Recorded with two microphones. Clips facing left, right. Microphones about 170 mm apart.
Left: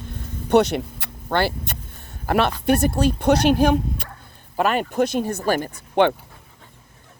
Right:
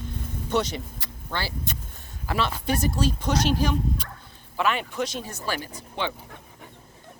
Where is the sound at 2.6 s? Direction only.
60° left (ahead or behind).